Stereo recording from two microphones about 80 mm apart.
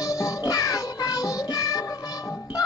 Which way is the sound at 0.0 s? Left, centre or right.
Left.